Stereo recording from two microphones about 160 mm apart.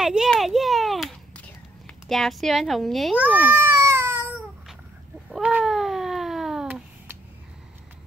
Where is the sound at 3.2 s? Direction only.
10° right (ahead or behind).